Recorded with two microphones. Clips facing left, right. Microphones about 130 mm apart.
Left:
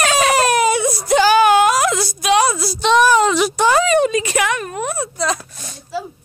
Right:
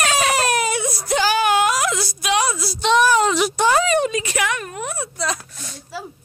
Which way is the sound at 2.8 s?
90° left.